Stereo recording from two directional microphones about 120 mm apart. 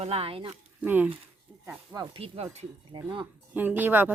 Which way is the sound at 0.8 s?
15° right (ahead or behind).